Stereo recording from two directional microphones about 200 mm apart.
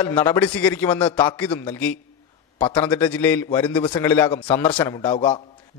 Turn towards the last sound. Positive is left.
turn(degrees=25)  # may be behind; listen again after turning